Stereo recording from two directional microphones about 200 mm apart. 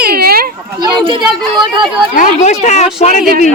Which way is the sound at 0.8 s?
25° right (ahead or behind).